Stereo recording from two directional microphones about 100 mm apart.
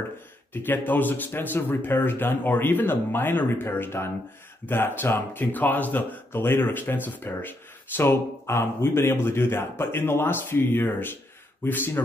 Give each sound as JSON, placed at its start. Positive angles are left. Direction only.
{"t": 0.5, "sound": "speech", "side_deg": 20}